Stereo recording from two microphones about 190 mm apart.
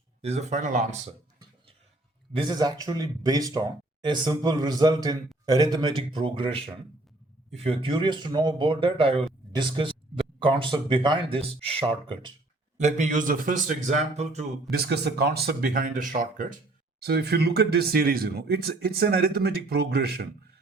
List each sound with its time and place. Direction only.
0.2 s a man's voice: 35° right (ahead or behind)
2.3 s a man's voice: 20° right (ahead or behind)
14.7 s speech: 60° right (ahead or behind); by 16.6 s 45° right (ahead or behind)
17.0 s speech: 55° right (ahead or behind)